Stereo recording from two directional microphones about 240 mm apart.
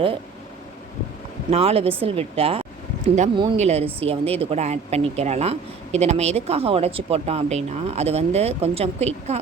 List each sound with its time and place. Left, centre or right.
1.5 s speech: right